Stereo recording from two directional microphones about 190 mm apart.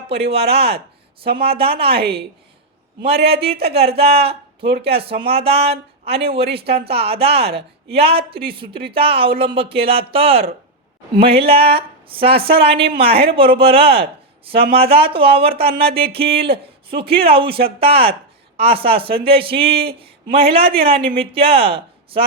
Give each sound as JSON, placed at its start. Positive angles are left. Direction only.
{"t": 0.1, "sound": "a woman's voice", "side_deg": -30}
{"t": 1.9, "sound": "a woman's voice", "side_deg": -55}
{"t": 3.2, "sound": "a woman's voice", "side_deg": -30}